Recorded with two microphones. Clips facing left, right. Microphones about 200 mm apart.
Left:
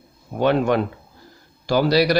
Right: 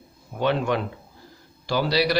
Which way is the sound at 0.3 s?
45° left (ahead or behind).